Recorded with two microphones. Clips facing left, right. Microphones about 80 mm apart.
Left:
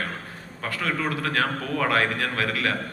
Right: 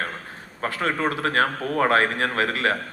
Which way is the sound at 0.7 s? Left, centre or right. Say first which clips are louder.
Right 2 dB; right.